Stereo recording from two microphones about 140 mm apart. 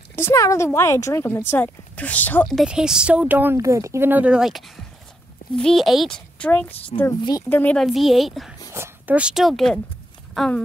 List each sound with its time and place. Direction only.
0.1 s speech: 20° left (ahead or behind)
2.4 s a child's voice: centre (ahead or behind)
7.2 s speech: 30° left (ahead or behind)
7.4 s speech: 10° left (ahead or behind)
7.8 s a child's voice: centre (ahead or behind)
8.7 s speech: 15° right (ahead or behind); by 10.6 s 5° left (ahead or behind)